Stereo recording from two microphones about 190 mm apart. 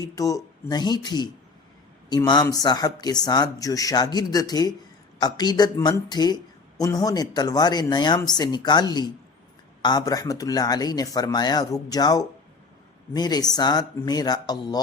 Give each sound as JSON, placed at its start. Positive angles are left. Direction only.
{"t": 0.0, "sound": "speech", "side_deg": 20}